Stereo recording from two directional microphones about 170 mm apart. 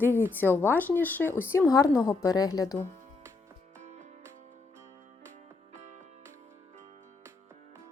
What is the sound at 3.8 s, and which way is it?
Music, 45° right (ahead or behind).